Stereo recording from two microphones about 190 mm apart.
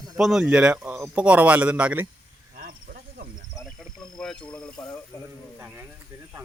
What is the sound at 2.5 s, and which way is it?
Cricket, 50° right (ahead or behind).